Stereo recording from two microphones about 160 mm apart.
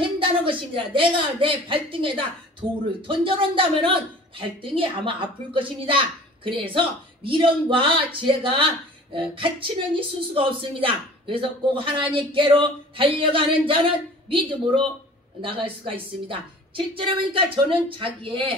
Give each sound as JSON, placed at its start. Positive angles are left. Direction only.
{"t": 0.2, "sound": "a woman's voice", "side_deg": -35}
{"t": 15.4, "sound": "a woman's voice", "side_deg": -35}